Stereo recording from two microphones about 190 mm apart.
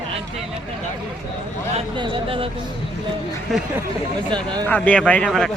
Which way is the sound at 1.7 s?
25° right (ahead or behind).